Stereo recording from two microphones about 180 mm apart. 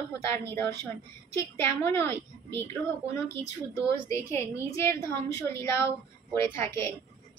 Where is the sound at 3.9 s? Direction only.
15° left (ahead or behind).